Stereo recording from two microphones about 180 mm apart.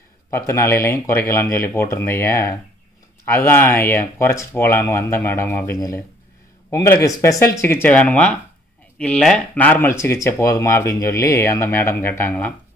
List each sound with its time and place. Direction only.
0.3 s speech: 15° left (ahead or behind)